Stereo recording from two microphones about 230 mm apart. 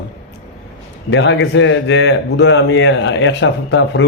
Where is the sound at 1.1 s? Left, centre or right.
Left.